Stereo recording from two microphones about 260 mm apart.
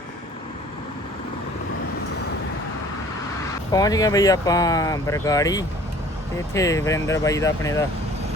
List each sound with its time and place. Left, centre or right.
3.7 s speech: centre